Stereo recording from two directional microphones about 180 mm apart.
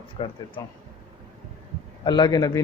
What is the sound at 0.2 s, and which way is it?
Speech, 30° left (ahead or behind).